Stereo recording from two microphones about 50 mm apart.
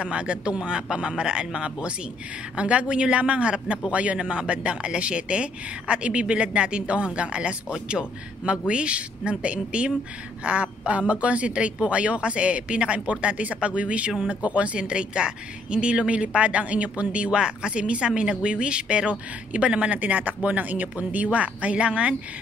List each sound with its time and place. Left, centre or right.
0.0 s a man's voice: right